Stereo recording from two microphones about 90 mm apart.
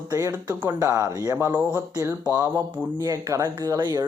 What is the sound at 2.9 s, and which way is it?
Speech, 40° right (ahead or behind).